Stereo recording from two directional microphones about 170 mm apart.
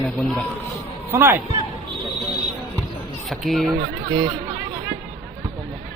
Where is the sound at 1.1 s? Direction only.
15° right (ahead or behind).